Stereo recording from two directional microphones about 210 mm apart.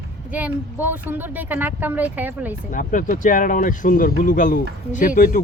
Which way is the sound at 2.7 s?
40° left (ahead or behind).